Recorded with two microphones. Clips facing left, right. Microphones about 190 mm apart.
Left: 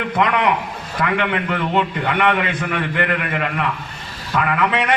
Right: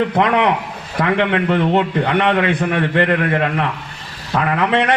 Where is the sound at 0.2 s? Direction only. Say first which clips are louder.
Even; 25° right (ahead or behind).